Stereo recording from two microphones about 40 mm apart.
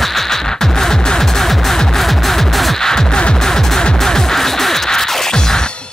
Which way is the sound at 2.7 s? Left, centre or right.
Centre.